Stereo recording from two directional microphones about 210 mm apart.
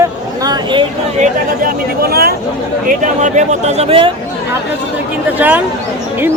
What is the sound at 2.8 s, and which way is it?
Speech, 35° right (ahead or behind).